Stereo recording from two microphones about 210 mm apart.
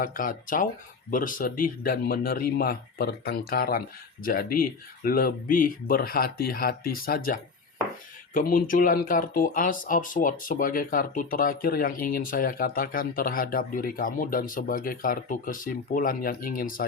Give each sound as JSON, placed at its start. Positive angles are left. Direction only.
{"t": 0.0, "sound": "speech", "side_deg": 40}